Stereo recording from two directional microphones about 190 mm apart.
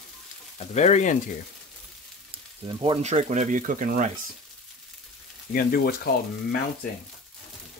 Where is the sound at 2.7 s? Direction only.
25° right (ahead or behind).